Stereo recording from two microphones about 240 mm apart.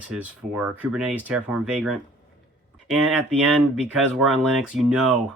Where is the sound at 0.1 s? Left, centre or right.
Centre.